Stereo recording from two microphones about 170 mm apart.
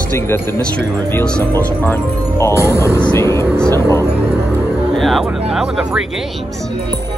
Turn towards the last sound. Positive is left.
turn(degrees=-5)  # may be behind; listen again after turning